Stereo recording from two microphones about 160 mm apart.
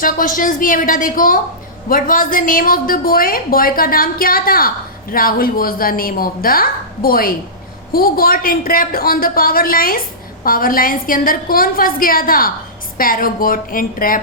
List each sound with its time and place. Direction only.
0.0 s a woman's voice: 60° left (ahead or behind)